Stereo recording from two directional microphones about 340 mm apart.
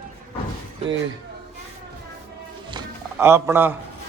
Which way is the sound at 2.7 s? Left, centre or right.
Centre.